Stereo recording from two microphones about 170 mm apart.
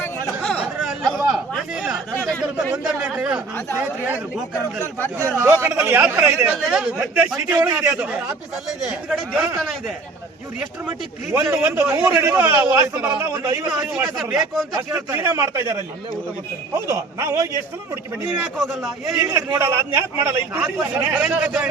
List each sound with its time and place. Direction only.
0.4 s a sound: centre (ahead or behind)
2.3 s a man's voice: centre (ahead or behind)
5.4 s a man's voice: 15° right (ahead or behind)
9.0 s speech: centre (ahead or behind)
10.8 s a man's voice: 15° right (ahead or behind); by 14.7 s centre (ahead or behind)
14.7 s a man's voice: 15° right (ahead or behind)
18.6 s speech: centre (ahead or behind)
19.2 s a man's voice: 15° right (ahead or behind)